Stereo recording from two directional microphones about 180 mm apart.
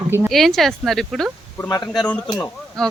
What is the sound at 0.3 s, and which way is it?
Speech, centre (ahead or behind).